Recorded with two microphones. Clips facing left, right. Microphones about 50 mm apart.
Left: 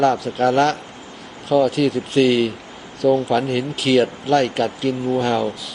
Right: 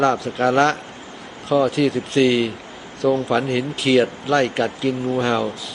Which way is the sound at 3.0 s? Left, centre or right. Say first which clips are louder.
Left 2 dB; centre.